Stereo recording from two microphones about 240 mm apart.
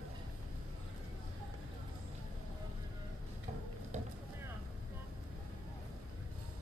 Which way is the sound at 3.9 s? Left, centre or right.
Right.